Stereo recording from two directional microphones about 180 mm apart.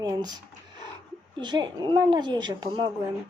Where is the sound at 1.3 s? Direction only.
25° right (ahead or behind).